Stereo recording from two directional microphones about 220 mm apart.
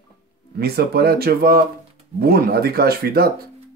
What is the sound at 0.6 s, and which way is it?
Speech, 45° right (ahead or behind).